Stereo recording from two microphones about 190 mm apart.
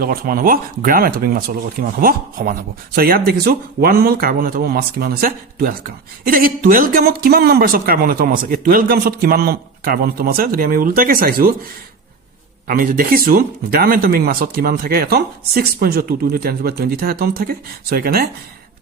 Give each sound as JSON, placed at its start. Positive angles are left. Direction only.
{"t": 0.0, "sound": "speech", "side_deg": -50}
{"t": 12.6, "sound": "speech", "side_deg": -45}